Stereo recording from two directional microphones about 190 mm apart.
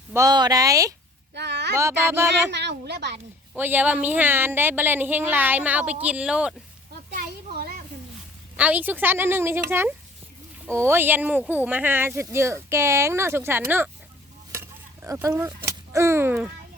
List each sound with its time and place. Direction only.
0.1 s speech: 15° right (ahead or behind)
1.3 s a sound: 65° right (ahead or behind)
1.7 s speech: 15° right (ahead or behind)
2.5 s a woman's voice: 60° right (ahead or behind)
3.5 s speech: 10° right (ahead or behind)
8.5 s speech: 10° right (ahead or behind)
14.5 s a sound: 15° right (ahead or behind)